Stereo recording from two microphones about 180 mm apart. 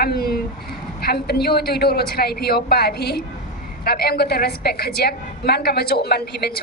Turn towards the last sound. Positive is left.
turn(degrees=60)  # may be behind; listen again after turning